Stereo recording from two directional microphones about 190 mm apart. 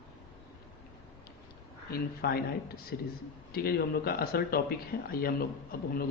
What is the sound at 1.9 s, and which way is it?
A man's voice, 55° left (ahead or behind).